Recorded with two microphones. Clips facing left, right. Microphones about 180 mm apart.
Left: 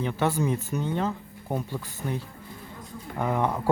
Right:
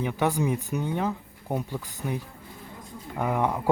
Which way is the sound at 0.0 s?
15° right (ahead or behind).